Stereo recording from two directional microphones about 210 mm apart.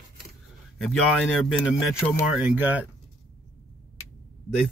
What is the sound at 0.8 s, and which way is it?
Speech, 5° left (ahead or behind).